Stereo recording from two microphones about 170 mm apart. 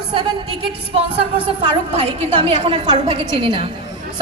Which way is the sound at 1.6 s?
30° right (ahead or behind).